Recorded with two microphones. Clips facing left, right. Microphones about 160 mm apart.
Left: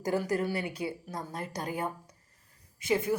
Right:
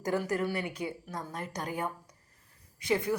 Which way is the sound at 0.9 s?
35° left (ahead or behind).